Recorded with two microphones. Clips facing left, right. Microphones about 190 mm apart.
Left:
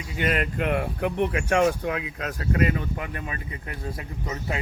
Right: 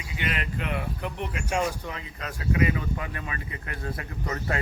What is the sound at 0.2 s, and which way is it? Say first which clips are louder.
Speech: left 6 dB; 45° left (ahead or behind).